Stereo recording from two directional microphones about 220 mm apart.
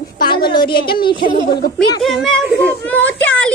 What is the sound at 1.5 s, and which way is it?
Speech, 45° left (ahead or behind).